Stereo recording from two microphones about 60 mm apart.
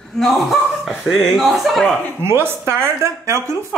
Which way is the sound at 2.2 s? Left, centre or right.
Right.